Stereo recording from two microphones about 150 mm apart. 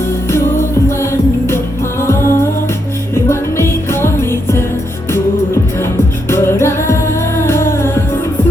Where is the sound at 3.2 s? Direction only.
15° left (ahead or behind).